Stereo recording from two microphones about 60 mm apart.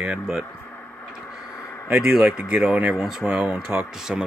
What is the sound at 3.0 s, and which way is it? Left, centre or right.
Speech, centre.